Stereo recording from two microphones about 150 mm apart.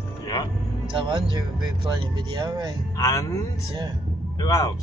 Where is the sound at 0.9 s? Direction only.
30° right (ahead or behind).